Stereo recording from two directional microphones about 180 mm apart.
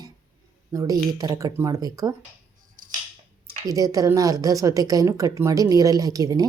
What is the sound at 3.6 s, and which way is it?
Speech, 20° right (ahead or behind).